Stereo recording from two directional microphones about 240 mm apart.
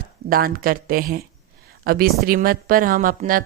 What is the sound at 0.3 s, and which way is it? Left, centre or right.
A woman's voice, right.